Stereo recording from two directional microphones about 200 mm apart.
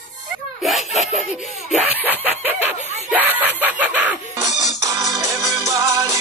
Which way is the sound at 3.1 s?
10° right (ahead or behind).